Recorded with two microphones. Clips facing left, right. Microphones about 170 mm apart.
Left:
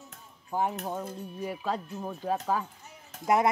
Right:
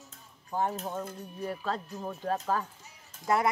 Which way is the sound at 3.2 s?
20° left (ahead or behind).